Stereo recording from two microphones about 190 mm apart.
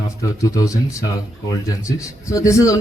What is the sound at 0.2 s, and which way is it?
Speech, 15° left (ahead or behind).